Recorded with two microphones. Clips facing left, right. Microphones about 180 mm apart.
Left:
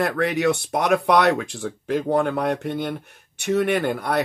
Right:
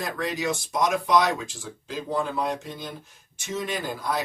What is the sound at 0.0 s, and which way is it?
Speech, 65° left (ahead or behind).